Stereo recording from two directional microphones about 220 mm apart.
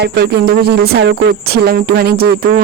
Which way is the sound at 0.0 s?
45° right (ahead or behind).